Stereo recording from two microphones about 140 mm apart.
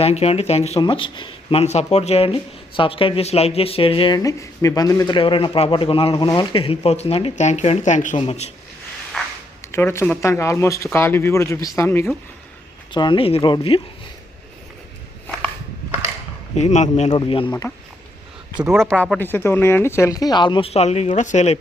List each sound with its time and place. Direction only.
0.0 s speech: 50° left (ahead or behind)
0.8 s speech: 40° left (ahead or behind)
4.2 s speech: 25° left (ahead or behind); by 8.1 s 60° left (ahead or behind)
8.1 s speech: 45° left (ahead or behind)
9.2 s a sound: centre (ahead or behind)
9.7 s speech: 20° left (ahead or behind)
12.9 s speech: 35° left (ahead or behind)
16.6 s a man's voice: 55° left (ahead or behind)
17.1 s speech: 35° left (ahead or behind)
18.5 s speech: 5° right (ahead or behind)
19.2 s speech: 15° left (ahead or behind); by 21.6 s 55° left (ahead or behind)